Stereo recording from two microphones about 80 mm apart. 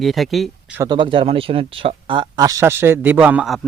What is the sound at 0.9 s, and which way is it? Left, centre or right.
Speech, right.